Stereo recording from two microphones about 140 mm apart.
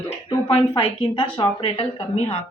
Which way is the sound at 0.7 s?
35° left (ahead or behind).